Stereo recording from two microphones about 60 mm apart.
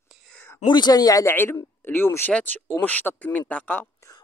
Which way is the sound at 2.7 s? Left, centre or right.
Left.